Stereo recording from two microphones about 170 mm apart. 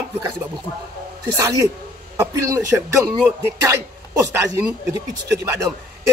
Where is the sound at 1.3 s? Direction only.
20° right (ahead or behind).